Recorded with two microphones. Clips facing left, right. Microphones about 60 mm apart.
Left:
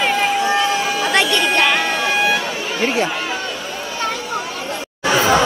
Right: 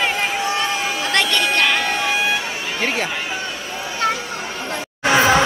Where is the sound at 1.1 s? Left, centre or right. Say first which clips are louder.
Left 2 dB; centre.